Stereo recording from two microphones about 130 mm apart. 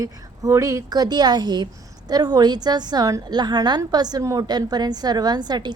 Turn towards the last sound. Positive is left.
turn(degrees=-35)  # may be behind; listen again after turning